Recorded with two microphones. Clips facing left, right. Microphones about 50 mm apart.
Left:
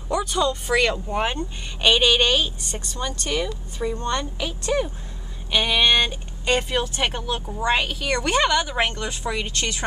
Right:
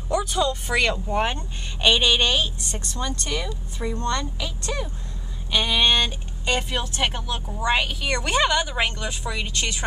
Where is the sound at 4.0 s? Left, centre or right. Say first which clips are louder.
Right 2 dB; centre.